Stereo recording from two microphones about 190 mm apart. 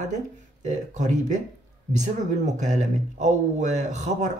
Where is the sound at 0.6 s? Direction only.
40° right (ahead or behind).